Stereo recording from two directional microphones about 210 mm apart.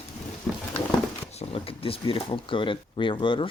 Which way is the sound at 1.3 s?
25° left (ahead or behind).